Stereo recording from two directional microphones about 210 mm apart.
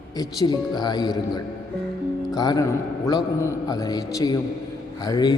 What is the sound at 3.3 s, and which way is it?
A man's voice, 15° left (ahead or behind).